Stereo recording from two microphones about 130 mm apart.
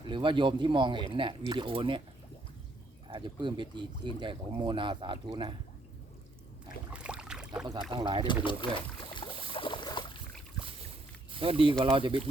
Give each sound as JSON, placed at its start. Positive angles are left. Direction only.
{"t": 0.0, "sound": "speech", "side_deg": -40}
{"t": 3.1, "sound": "speech", "side_deg": -35}
{"t": 6.9, "sound": "boat", "side_deg": -5}
{"t": 7.7, "sound": "speech", "side_deg": -35}
{"t": 8.2, "sound": "boat", "side_deg": 40}
{"t": 11.3, "sound": "speech", "side_deg": -45}